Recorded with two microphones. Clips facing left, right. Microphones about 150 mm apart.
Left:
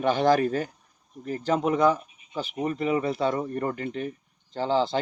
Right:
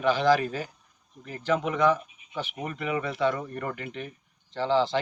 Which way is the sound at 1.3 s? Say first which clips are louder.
Left 3 dB; 40° left (ahead or behind).